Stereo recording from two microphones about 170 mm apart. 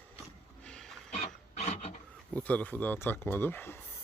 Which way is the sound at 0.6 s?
5° left (ahead or behind).